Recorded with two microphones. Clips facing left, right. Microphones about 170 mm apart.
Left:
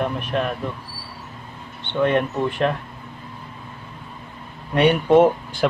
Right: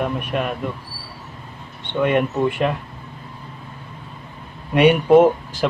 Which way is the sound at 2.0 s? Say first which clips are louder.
Right 1 dB; 10° right (ahead or behind).